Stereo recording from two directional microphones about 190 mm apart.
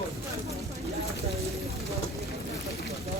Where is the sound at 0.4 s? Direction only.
15° right (ahead or behind).